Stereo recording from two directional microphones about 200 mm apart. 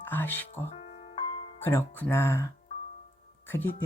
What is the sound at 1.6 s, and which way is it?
Speech, 10° left (ahead or behind).